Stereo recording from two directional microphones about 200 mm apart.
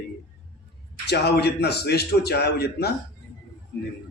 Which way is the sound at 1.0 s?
55° left (ahead or behind).